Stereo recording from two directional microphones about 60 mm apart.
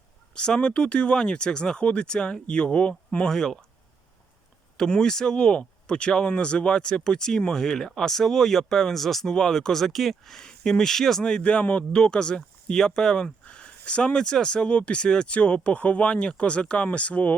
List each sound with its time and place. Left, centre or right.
0.3 s speech: centre
4.8 s speech: centre